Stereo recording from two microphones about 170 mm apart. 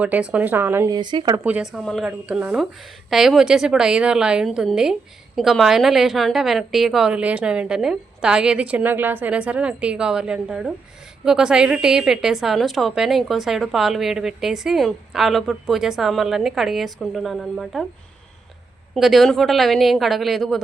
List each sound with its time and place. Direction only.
0.0 s speech: 5° right (ahead or behind)
0.9 s speech: 25° right (ahead or behind)
1.5 s a woman's voice: 5° right (ahead or behind)
18.9 s a woman's voice: centre (ahead or behind)